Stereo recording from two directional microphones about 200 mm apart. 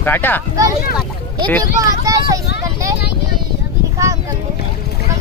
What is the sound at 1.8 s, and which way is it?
Speech, 15° right (ahead or behind).